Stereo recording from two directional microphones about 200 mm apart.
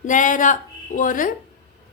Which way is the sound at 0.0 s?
40° left (ahead or behind).